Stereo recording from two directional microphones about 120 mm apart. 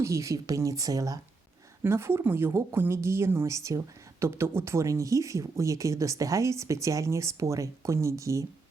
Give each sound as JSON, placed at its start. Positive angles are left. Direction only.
{"t": 0.0, "sound": "speech", "side_deg": -25}